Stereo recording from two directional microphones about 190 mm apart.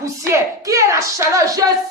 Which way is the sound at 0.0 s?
15° right (ahead or behind).